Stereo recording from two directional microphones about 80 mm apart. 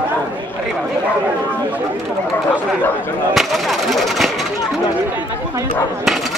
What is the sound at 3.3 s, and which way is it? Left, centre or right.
Speech, centre.